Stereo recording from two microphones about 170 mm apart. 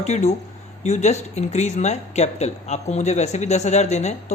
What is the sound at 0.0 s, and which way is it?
Speech, 40° left (ahead or behind).